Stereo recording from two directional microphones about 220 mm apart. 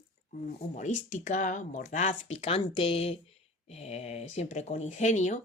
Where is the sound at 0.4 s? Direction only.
35° left (ahead or behind).